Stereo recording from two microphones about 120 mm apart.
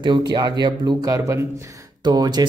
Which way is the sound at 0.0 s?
40° right (ahead or behind).